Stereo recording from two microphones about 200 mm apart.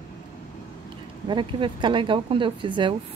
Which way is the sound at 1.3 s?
25° right (ahead or behind).